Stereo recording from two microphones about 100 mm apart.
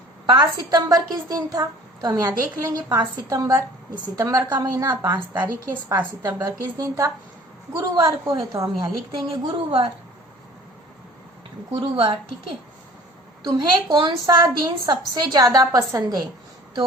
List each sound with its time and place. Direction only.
0.3 s a woman's voice: 45° right (ahead or behind)
6.2 s a woman's voice: 35° right (ahead or behind)
8.8 s a woman's voice: 60° right (ahead or behind)
11.7 s a woman's voice: 60° right (ahead or behind)
13.4 s a woman's voice: 45° right (ahead or behind)